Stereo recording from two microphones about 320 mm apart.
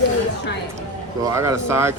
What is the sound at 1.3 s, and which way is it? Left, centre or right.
Speech, centre.